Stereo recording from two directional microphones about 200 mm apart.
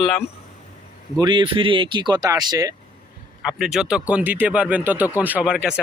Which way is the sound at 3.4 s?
5° right (ahead or behind).